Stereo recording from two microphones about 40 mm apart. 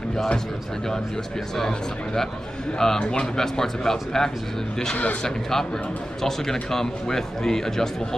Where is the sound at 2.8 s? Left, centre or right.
Centre.